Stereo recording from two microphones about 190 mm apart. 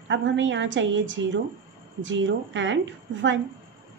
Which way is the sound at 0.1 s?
75° right (ahead or behind).